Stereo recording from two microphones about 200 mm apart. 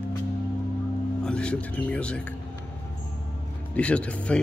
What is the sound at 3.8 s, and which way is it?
Speech, 5° left (ahead or behind).